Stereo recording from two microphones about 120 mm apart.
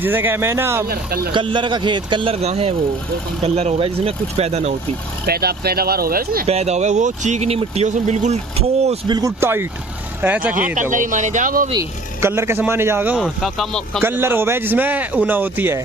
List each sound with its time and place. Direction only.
0.0 s a man's voice: 15° right (ahead or behind)
1.3 s a man's voice: 45° right (ahead or behind)
2.3 s speech: 60° right (ahead or behind)
6.4 s speech: 65° right (ahead or behind)
9.0 s speech: 35° right (ahead or behind)
9.4 s a man's voice: 20° right (ahead or behind)
10.8 s speech: 90° right
12.2 s a man's voice: 20° right (ahead or behind)
13.2 s speech: centre (ahead or behind)
14.0 s a man's voice: 20° right (ahead or behind)